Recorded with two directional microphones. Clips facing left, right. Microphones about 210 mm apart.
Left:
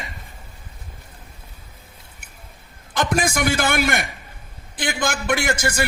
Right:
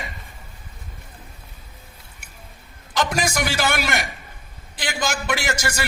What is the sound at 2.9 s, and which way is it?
A man's voice, 55° left (ahead or behind).